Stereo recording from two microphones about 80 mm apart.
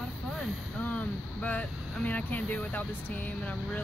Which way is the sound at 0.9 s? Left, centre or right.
Centre.